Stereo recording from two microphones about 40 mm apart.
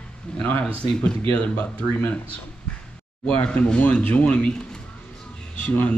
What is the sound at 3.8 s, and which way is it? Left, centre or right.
Speech, left.